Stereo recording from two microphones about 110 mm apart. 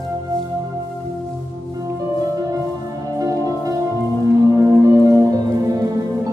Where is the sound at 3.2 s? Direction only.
30° right (ahead or behind).